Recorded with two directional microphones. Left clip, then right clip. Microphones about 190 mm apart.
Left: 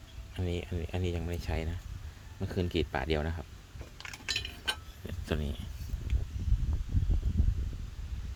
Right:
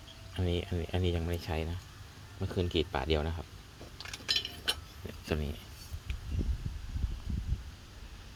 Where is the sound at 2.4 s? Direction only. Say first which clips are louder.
Right 1 dB; 35° left (ahead or behind).